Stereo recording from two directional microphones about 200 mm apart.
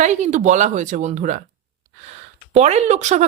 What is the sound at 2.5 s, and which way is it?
Speech, 35° right (ahead or behind).